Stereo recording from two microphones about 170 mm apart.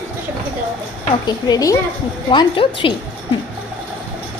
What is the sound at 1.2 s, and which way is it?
A woman's voice, 25° left (ahead or behind).